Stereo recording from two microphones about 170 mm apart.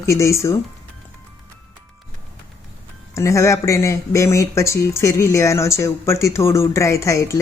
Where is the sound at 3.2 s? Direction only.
15° left (ahead or behind).